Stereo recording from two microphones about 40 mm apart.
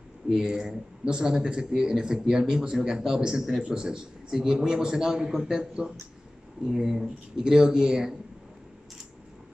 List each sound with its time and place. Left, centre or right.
0.3 s speech: centre